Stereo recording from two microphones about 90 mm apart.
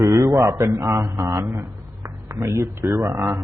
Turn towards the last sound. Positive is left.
turn(degrees=-35)  # may be behind; listen again after turning